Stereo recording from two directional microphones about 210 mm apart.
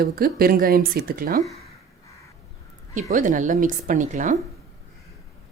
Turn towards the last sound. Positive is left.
turn(degrees=-35)  # may be behind; listen again after turning